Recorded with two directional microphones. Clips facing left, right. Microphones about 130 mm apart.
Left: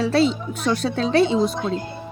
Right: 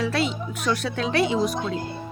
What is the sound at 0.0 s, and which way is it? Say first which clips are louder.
A woman's voice: left 6 dB; 30° left (ahead or behind).